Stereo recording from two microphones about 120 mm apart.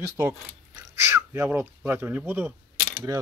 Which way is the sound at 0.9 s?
25° right (ahead or behind).